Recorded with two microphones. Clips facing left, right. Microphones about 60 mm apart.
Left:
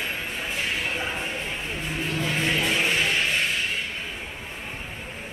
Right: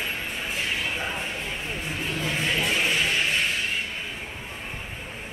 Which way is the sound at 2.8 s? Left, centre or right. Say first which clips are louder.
Left 1 dB; centre.